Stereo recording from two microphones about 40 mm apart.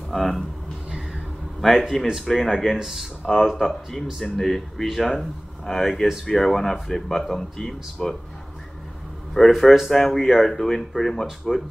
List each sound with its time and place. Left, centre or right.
0.1 s speech: centre
1.6 s speech: centre
2.8 s speech: centre
3.3 s speech: centre
9.4 s speech: centre
9.8 s speech: centre